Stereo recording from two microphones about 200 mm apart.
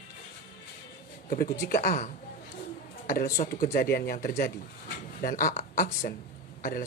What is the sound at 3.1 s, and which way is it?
Speech, 50° left (ahead or behind).